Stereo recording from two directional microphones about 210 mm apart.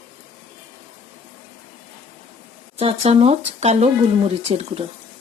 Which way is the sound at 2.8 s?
25° right (ahead or behind).